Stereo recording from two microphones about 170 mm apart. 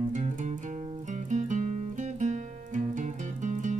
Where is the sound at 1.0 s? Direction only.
45° right (ahead or behind).